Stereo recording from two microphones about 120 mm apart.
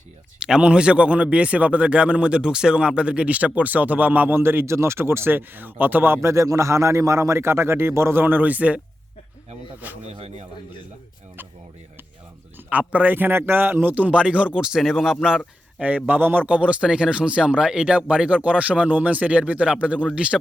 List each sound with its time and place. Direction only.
0.3 s a man's voice: 5° right (ahead or behind)
10.1 s speech: 60° right (ahead or behind)
12.9 s a man's voice: 15° right (ahead or behind)